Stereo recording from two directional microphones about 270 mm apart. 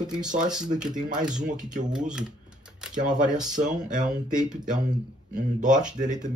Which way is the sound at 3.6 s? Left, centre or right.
Right.